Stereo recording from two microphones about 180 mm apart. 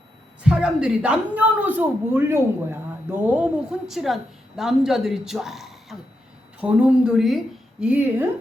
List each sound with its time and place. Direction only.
0.4 s a woman's voice: 5° right (ahead or behind)